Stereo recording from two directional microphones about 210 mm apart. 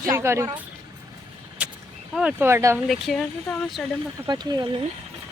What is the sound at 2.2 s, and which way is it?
Speech, 5° right (ahead or behind).